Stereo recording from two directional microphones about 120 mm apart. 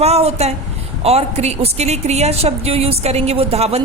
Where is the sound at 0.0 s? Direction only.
60° right (ahead or behind).